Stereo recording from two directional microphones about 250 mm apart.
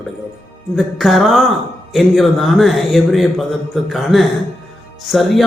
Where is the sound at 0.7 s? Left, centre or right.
Centre.